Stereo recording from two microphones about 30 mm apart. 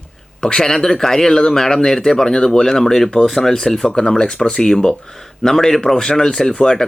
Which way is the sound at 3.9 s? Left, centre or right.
Left.